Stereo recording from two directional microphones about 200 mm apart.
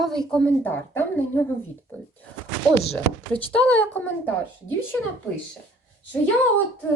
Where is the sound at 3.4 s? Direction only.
5° left (ahead or behind).